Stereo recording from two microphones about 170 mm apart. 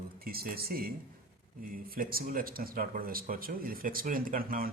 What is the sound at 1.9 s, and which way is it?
Speech, 60° right (ahead or behind).